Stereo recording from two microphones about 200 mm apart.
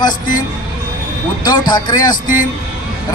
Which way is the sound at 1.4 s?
20° left (ahead or behind).